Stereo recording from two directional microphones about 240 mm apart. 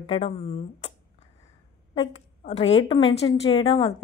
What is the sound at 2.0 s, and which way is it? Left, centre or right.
A woman's voice, left.